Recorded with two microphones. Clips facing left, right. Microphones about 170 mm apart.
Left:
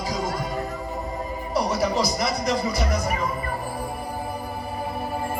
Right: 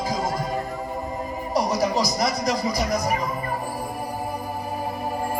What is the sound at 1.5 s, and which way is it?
Speech, 40° right (ahead or behind).